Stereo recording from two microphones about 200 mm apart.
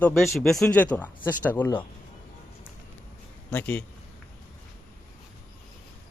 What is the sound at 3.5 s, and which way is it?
Speech, 10° left (ahead or behind).